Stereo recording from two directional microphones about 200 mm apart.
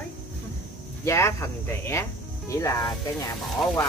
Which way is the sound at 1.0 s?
15° left (ahead or behind).